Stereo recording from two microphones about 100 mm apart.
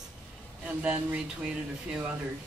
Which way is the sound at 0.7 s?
15° right (ahead or behind).